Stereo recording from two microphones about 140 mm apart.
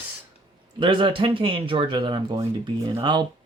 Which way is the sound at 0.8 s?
35° right (ahead or behind).